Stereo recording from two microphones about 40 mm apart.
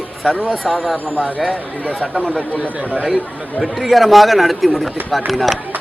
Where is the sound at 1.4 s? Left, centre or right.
Right.